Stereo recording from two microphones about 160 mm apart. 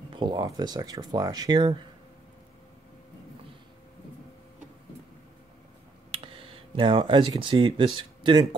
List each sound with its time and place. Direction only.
0.1 s speech: 25° right (ahead or behind)
6.1 s speech: 35° right (ahead or behind)